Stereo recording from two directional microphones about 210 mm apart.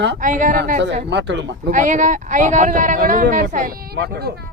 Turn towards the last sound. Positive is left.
turn(degrees=-50)  # may be behind; listen again after turning